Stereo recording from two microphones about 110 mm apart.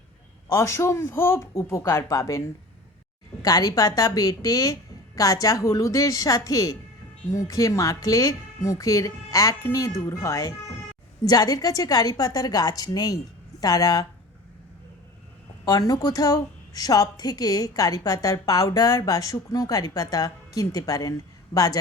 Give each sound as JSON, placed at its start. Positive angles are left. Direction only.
{"t": 0.5, "sound": "speech", "side_deg": 25}
{"t": 3.4, "sound": "a woman's voice", "side_deg": 35}
{"t": 15.6, "sound": "a woman's voice", "side_deg": 30}